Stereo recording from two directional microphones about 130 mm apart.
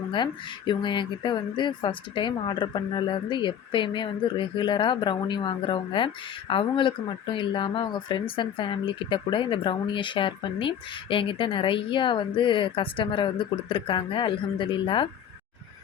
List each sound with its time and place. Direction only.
0.7 s speech: 35° left (ahead or behind)